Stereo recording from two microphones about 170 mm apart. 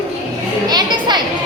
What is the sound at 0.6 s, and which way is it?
Speech, 25° right (ahead or behind).